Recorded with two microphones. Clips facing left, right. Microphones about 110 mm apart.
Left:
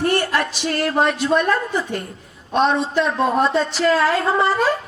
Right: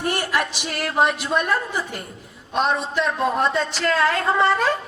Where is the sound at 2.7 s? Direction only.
30° left (ahead or behind).